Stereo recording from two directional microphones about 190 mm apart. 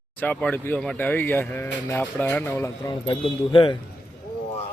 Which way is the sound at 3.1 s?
25° left (ahead or behind).